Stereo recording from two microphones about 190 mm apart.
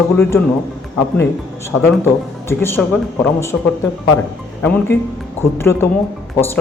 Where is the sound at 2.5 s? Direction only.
10° left (ahead or behind).